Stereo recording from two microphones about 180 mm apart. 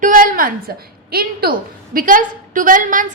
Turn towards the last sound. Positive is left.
turn(degrees=-45)  # may be behind; listen again after turning